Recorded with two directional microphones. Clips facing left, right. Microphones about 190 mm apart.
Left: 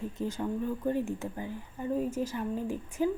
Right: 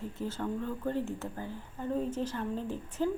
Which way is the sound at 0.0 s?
15° left (ahead or behind).